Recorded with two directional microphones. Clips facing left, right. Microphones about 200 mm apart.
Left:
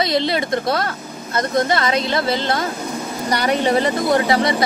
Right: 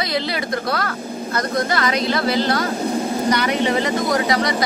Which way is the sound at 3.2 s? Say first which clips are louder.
Left 3 dB; 35° left (ahead or behind).